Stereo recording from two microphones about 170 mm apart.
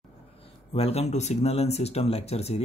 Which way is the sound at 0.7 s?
35° left (ahead or behind).